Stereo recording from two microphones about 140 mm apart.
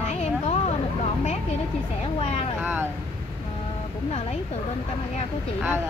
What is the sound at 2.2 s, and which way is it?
Speech, 50° left (ahead or behind).